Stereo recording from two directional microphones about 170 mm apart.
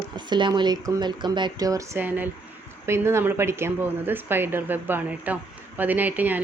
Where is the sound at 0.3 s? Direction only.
25° right (ahead or behind).